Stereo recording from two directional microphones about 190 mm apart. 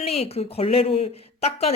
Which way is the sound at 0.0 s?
30° left (ahead or behind).